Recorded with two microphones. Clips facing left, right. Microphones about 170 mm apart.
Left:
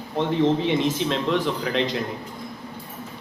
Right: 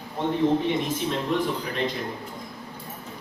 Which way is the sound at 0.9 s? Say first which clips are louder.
Left 2 dB; 90° left.